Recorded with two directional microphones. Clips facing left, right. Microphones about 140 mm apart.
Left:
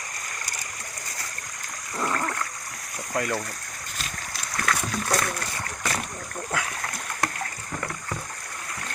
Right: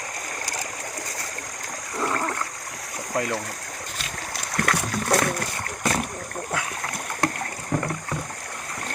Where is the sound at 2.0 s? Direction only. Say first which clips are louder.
Right 1 dB; 15° right (ahead or behind).